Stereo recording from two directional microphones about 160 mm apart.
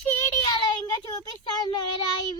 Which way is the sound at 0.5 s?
25° left (ahead or behind).